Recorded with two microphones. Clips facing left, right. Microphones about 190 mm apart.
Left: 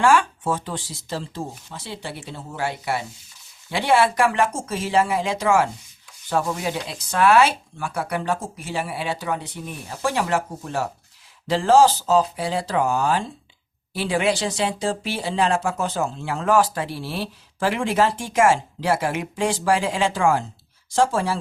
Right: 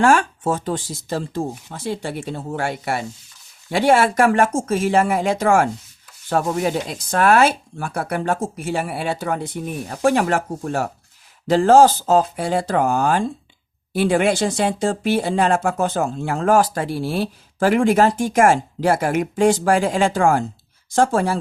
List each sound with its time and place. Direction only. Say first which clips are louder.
0.0 s speech: right 2 dB; 45° right (ahead or behind)